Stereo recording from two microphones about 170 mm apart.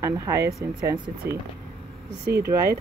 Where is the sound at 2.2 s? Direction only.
70° right (ahead or behind).